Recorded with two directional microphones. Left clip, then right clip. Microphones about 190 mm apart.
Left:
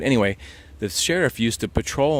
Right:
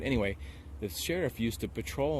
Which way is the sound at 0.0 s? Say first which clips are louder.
Left 11 dB; 35° left (ahead or behind).